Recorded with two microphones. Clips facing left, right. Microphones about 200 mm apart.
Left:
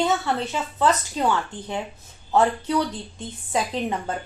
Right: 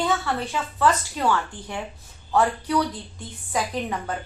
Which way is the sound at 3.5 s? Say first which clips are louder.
Left 2 dB; 25° left (ahead or behind).